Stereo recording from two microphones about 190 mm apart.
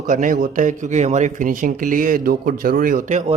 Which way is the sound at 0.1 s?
45° right (ahead or behind).